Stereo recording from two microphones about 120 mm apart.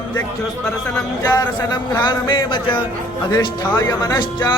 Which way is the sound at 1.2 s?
30° left (ahead or behind).